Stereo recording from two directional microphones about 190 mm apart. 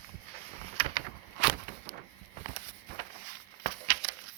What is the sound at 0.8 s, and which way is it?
Vehicle, 30° right (ahead or behind).